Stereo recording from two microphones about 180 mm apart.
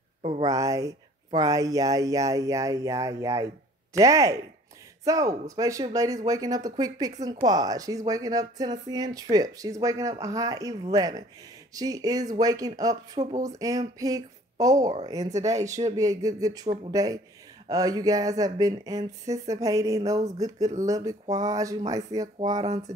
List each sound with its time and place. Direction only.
0.4 s speech: 20° right (ahead or behind)